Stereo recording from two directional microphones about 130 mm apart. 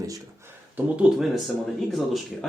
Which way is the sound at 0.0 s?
25° right (ahead or behind).